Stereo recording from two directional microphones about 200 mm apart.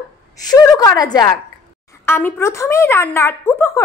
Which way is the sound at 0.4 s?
20° left (ahead or behind).